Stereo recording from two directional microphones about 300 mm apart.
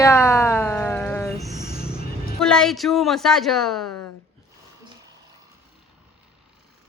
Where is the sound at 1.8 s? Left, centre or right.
Centre.